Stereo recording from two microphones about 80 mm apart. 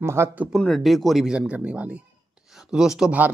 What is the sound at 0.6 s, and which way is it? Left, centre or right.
Speech, centre.